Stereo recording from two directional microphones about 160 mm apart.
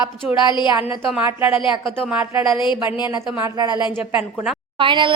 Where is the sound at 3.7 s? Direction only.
30° left (ahead or behind).